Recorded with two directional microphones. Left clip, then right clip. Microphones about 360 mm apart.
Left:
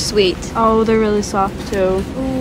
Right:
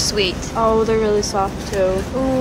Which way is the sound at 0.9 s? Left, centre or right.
Left.